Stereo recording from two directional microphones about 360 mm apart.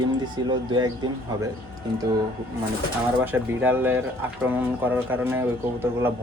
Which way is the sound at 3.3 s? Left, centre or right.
Centre.